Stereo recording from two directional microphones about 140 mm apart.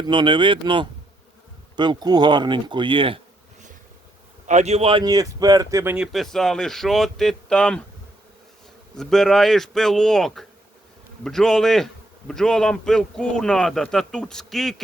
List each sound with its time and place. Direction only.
0.1 s speech: 35° right (ahead or behind)
4.4 s a man's voice: 55° right (ahead or behind)
5.0 s speech: 25° right (ahead or behind)
5.8 s speech: 15° right (ahead or behind)
6.1 s a man's voice: centre (ahead or behind)
9.0 s a man's voice: 5° left (ahead or behind)